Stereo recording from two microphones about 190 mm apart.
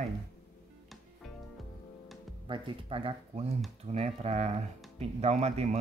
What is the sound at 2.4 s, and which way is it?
Speech, 25° right (ahead or behind).